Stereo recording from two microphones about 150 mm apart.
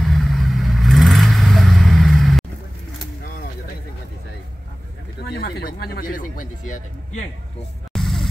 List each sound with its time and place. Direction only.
0.0 s vehicle: centre (ahead or behind)
5.2 s a sound: 90° left; by 6.2 s 75° left (ahead or behind)
7.9 s music: centre (ahead or behind)